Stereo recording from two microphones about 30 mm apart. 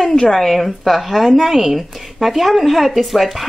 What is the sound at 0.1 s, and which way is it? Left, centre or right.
Speech, centre.